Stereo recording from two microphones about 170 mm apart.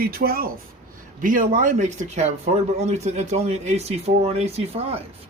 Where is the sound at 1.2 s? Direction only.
50° right (ahead or behind).